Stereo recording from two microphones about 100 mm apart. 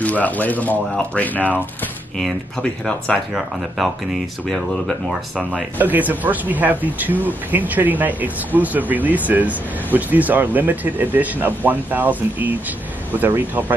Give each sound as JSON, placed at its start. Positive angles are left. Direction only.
{"t": 0.0, "sound": "speech", "side_deg": 15}
{"t": 2.6, "sound": "speech", "side_deg": 5}